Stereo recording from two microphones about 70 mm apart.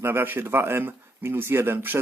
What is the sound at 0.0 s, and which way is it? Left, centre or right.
Speech, right.